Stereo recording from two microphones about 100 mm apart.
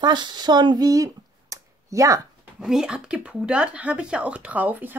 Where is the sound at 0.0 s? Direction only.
50° right (ahead or behind); by 2.2 s 35° right (ahead or behind).